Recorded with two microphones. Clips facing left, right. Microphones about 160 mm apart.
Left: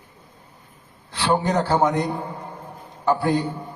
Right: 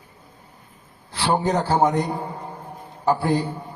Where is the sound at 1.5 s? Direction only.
30° right (ahead or behind).